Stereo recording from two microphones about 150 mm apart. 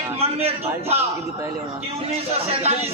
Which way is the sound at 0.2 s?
45° right (ahead or behind).